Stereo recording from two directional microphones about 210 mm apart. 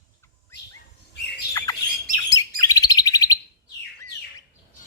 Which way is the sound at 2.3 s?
15° left (ahead or behind).